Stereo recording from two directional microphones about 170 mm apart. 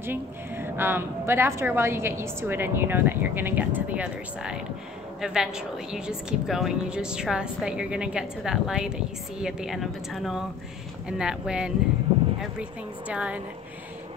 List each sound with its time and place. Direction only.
0.0 s a woman's voice: 10° right (ahead or behind)
13.1 s speech: 5° right (ahead or behind)